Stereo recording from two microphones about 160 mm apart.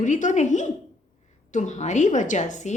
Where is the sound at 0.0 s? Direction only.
50° left (ahead or behind).